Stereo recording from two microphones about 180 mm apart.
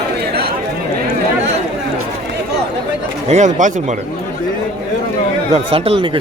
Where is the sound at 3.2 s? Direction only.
40° right (ahead or behind).